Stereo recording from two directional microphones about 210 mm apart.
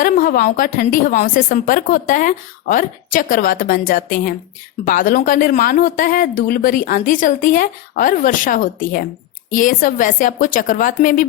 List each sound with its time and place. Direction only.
0.0 s a woman's voice: 45° left (ahead or behind)